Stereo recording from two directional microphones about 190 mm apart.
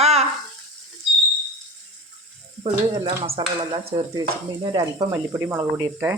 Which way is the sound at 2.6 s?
25° right (ahead or behind).